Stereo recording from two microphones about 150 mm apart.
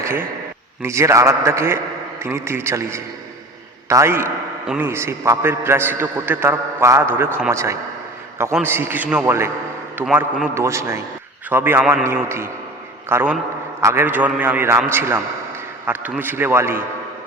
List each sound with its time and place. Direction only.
0.0 s a man's voice: 15° right (ahead or behind)
4.6 s a man's voice: 5° right (ahead or behind)
4.9 s a man's voice: 15° right (ahead or behind)